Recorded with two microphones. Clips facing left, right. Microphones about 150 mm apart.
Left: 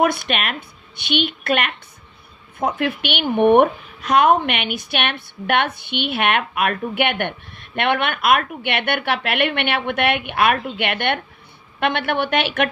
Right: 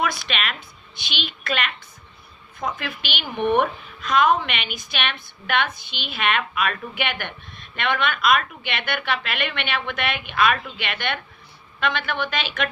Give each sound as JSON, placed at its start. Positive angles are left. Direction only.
{"t": 0.0, "sound": "a woman's voice", "side_deg": 55}